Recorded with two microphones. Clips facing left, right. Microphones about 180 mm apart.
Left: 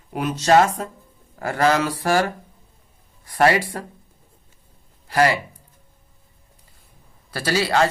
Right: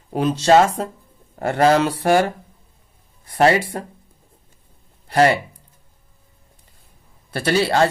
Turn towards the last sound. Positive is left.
turn(degrees=-30)  # may be behind; listen again after turning